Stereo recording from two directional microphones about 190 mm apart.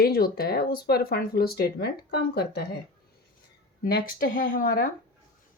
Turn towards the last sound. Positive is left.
turn(degrees=45)  # may be behind; listen again after turning